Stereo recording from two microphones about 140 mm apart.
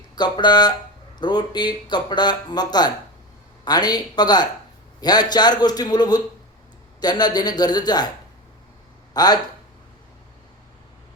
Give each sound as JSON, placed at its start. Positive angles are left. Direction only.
{"t": 0.2, "sound": "a man's voice", "side_deg": 30}
{"t": 9.1, "sound": "a man's voice", "side_deg": 30}